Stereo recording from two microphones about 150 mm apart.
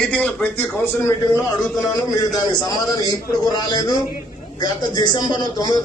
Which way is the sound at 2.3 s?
25° left (ahead or behind).